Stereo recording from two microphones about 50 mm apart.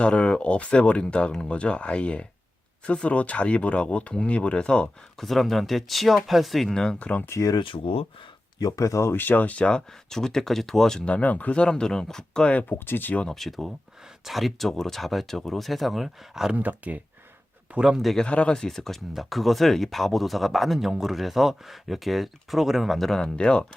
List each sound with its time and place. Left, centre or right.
0.0 s speech: centre
5.1 s speech: centre
7.0 s speech: left
8.7 s speech: left
9.1 s speech: left
10.1 s speech: centre
11.0 s speech: left
12.8 s speech: left
13.2 s speech: centre
16.6 s speech: right
17.7 s a man's voice: centre
18.2 s speech: left
23.4 s speech: left